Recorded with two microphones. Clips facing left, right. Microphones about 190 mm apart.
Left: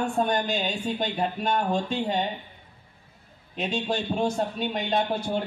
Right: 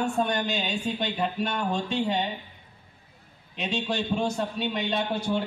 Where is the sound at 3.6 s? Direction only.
50° left (ahead or behind).